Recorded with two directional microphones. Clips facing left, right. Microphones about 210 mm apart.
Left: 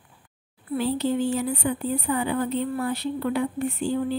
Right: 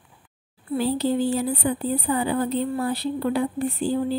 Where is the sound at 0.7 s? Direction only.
35° right (ahead or behind).